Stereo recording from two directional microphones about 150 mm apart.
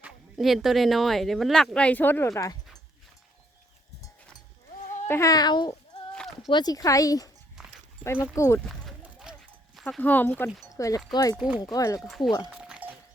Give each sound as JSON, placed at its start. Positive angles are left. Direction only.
{"t": 0.0, "sound": "speech", "side_deg": 0}
{"t": 5.0, "sound": "speech", "side_deg": 20}
{"t": 6.1, "sound": "a sound", "side_deg": 0}
{"t": 6.5, "sound": "speech", "side_deg": 25}
{"t": 7.6, "sound": "dog", "side_deg": -5}
{"t": 8.0, "sound": "speech", "side_deg": 20}
{"t": 8.6, "sound": "a sound", "side_deg": 0}
{"t": 10.0, "sound": "speech", "side_deg": 10}
{"t": 11.3, "sound": "speech", "side_deg": -10}
{"t": 11.6, "sound": "speech", "side_deg": 25}
{"t": 11.9, "sound": "speech", "side_deg": 0}
{"t": 12.5, "sound": "music", "side_deg": -5}